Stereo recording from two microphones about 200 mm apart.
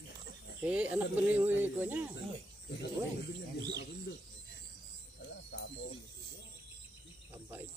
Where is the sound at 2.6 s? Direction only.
60° left (ahead or behind).